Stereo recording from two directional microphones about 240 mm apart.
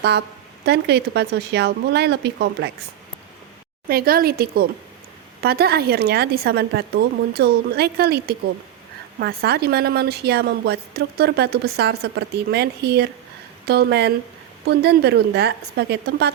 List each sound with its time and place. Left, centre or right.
0.0 s a woman's voice: right
3.8 s a woman's voice: right